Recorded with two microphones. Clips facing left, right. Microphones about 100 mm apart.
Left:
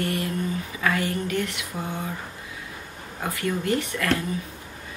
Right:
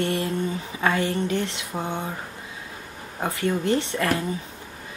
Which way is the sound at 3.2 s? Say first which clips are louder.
Right 3 dB; 25° right (ahead or behind).